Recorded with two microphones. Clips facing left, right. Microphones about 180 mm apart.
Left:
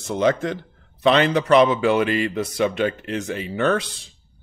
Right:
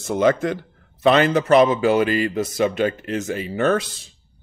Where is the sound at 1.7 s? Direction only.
40° right (ahead or behind).